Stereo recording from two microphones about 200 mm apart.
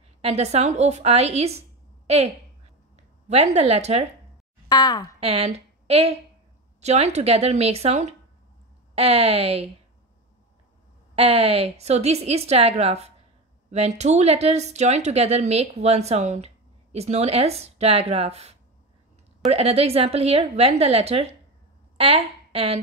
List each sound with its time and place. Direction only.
0.2 s speech: 30° right (ahead or behind)
3.3 s speech: 30° right (ahead or behind)
4.6 s speech: 20° left (ahead or behind)
5.2 s a woman's voice: 30° right (ahead or behind)
11.1 s a woman's voice: 30° right (ahead or behind)